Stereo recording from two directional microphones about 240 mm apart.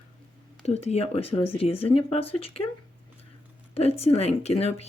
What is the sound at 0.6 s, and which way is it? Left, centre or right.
Speech, left.